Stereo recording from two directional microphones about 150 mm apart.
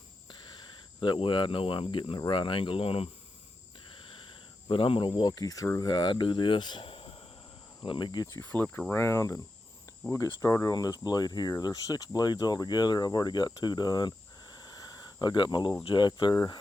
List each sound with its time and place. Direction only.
0.3 s cricket: 30° left (ahead or behind)
1.0 s speech: 30° left (ahead or behind)
4.7 s speech: 35° left (ahead or behind)